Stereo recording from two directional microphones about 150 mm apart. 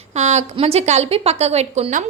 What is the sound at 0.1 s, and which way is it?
A woman's voice, 50° right (ahead or behind).